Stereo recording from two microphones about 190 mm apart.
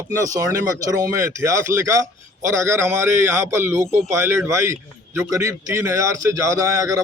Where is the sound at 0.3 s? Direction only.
15° right (ahead or behind).